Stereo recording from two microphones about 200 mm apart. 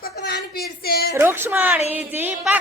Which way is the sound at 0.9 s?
50° left (ahead or behind).